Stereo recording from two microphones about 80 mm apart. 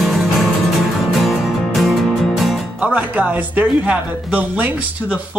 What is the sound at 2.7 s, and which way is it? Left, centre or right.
Speech, centre.